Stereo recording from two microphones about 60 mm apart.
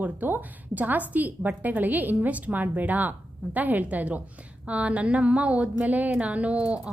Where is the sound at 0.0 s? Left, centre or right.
Right.